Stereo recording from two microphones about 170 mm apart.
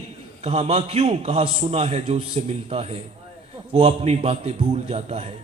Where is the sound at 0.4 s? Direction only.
40° right (ahead or behind).